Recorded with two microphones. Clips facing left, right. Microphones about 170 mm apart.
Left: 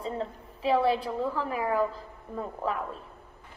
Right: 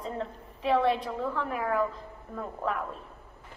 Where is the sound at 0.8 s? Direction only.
30° left (ahead or behind).